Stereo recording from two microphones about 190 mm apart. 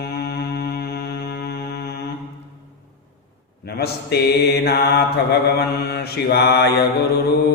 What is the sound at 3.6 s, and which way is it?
Speech, 55° left (ahead or behind).